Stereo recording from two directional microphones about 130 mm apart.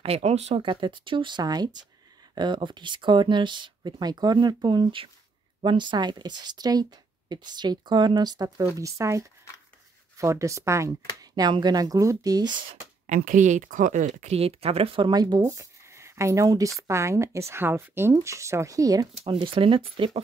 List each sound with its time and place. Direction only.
0.0 s speech: 50° right (ahead or behind); by 12.4 s 30° right (ahead or behind)
12.5 s speech: 80° right; by 15.4 s 35° right (ahead or behind)
15.5 s speech: 20° right (ahead or behind)
19.4 s speech: 45° right (ahead or behind)